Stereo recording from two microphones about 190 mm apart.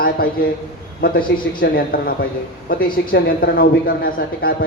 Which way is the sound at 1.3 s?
60° left (ahead or behind).